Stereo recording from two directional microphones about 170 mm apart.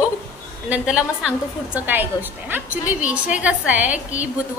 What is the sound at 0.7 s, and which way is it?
A woman's voice, 5° right (ahead or behind).